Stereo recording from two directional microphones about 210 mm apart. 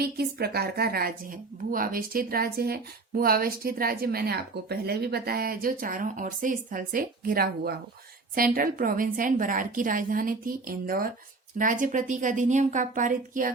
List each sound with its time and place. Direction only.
0.0 s a woman's voice: 50° right (ahead or behind)